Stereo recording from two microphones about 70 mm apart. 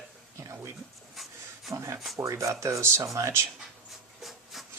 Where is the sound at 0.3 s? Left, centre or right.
Right.